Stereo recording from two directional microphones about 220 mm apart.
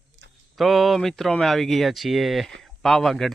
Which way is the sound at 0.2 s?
55° right (ahead or behind).